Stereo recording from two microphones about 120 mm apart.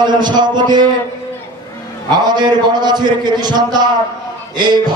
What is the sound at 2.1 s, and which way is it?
A man's voice, 40° right (ahead or behind).